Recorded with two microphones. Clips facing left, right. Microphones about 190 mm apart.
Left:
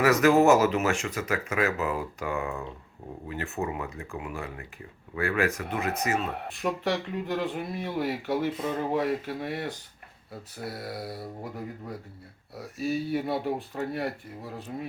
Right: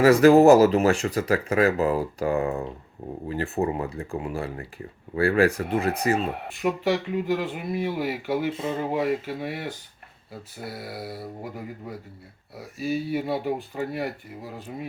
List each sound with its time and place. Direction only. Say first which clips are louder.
0.0 s speech: right 6 dB; 30° right (ahead or behind)
6.5 s speech: right 5 dB; centre (ahead or behind)
8.5 s speech: right 2 dB; 25° right (ahead or behind)
8.8 s speech: right 2 dB; 5° right (ahead or behind)